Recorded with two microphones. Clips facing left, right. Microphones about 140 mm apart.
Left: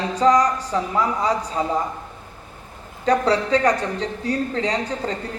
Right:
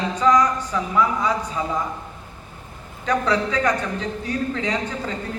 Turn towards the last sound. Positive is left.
turn(degrees=35)  # may be behind; listen again after turning